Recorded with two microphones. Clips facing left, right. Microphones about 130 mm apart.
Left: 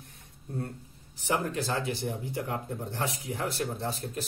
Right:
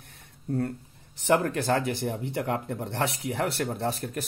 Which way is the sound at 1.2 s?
60° right (ahead or behind).